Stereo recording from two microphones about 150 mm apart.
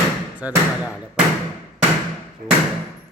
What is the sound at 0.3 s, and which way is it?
Speech, 10° right (ahead or behind).